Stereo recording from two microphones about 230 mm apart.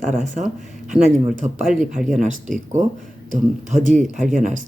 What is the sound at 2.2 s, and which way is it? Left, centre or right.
Speech, right.